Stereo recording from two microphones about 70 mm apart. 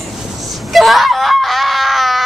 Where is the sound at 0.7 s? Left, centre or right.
Centre.